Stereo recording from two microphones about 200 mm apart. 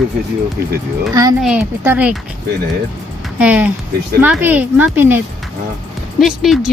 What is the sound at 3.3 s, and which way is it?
A woman's voice, 5° right (ahead or behind).